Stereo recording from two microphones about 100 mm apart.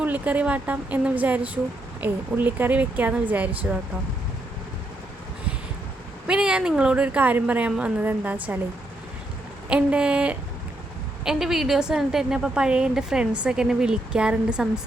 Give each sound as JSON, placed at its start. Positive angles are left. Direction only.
{"t": 0.0, "sound": "a woman's voice", "side_deg": -15}
{"t": 6.2, "sound": "a woman's voice", "side_deg": -10}
{"t": 9.6, "sound": "a woman's voice", "side_deg": -10}